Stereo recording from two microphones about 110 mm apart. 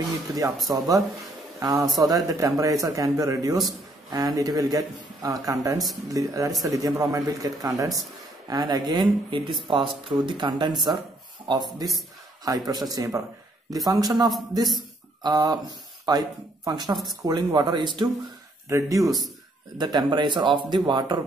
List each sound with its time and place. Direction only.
0.7 s a man's voice: 35° right (ahead or behind)
9.7 s a man's voice: 55° right (ahead or behind)
18.7 s speech: 30° right (ahead or behind)
19.0 s speech: centre (ahead or behind)
19.8 s speech: 40° right (ahead or behind)